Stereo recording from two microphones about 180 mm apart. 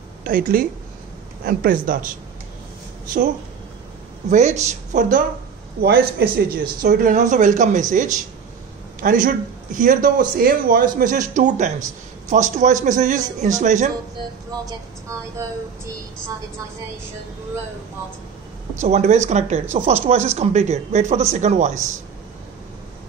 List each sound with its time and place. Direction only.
0.2 s a man's voice: 50° right (ahead or behind)
4.3 s speech: 40° right (ahead or behind)
5.8 s a man's voice: 60° right (ahead or behind); by 13.8 s 45° right (ahead or behind)
14.7 s a woman's voice: 15° right (ahead or behind)
18.8 s speech: 40° right (ahead or behind)